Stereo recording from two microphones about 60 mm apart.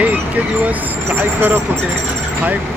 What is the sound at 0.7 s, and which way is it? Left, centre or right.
Speech, right.